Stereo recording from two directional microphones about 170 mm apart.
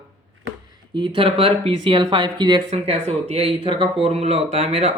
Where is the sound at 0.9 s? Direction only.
30° right (ahead or behind).